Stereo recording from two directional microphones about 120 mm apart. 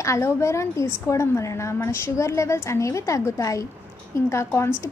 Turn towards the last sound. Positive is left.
turn(degrees=20)  # may be behind; listen again after turning